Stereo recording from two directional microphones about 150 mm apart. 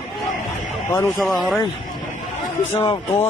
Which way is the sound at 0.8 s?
20° left (ahead or behind).